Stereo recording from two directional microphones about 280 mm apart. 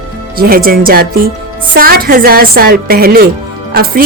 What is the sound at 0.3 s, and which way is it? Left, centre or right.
Speech, right.